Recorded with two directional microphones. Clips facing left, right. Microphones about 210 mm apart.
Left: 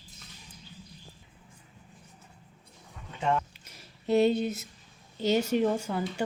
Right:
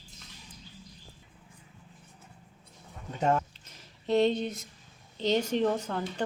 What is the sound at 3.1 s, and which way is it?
Speech, 40° right (ahead or behind).